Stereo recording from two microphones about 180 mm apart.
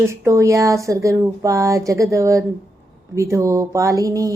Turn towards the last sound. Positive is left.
turn(degrees=-20)  # may be behind; listen again after turning